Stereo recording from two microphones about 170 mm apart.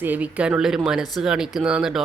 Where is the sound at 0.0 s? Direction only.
10° right (ahead or behind).